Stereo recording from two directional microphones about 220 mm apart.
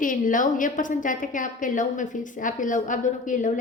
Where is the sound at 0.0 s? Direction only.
35° left (ahead or behind).